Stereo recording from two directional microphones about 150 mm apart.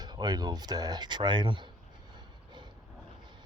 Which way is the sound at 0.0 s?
30° right (ahead or behind).